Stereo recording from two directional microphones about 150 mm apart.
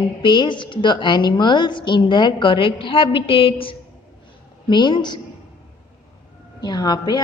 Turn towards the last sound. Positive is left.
turn(degrees=25)  # may be behind; listen again after turning